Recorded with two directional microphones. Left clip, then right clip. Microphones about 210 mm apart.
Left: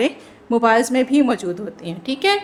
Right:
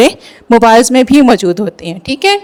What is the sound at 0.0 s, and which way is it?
A woman's voice, 45° right (ahead or behind).